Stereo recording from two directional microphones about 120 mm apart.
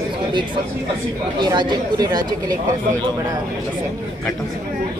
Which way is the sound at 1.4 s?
35° right (ahead or behind).